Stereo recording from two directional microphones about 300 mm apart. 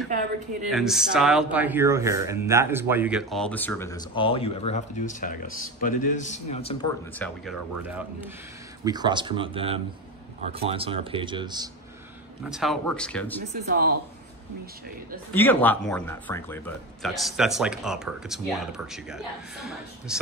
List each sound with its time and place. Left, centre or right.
0.7 s speech: centre
7.2 s speech: centre
12.4 s speech: centre
13.6 s speech: right
15.3 s speech: centre